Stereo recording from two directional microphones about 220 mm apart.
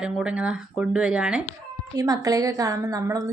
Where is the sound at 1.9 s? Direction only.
15° right (ahead or behind).